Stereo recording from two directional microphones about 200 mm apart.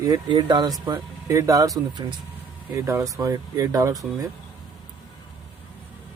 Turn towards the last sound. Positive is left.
turn(degrees=-15)  # may be behind; listen again after turning